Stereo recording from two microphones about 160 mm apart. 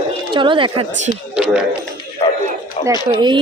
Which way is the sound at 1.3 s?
5° right (ahead or behind).